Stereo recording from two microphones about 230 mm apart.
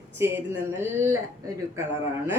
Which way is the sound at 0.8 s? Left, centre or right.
Centre.